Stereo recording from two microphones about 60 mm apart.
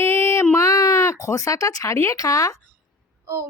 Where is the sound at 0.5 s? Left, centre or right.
Left.